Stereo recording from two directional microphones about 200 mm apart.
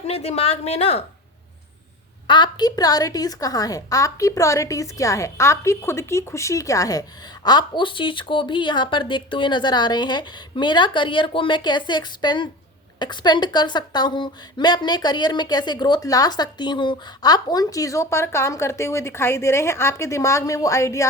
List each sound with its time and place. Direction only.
0.0 s a woman's voice: 30° left (ahead or behind)
2.2 s a woman's voice: 25° left (ahead or behind)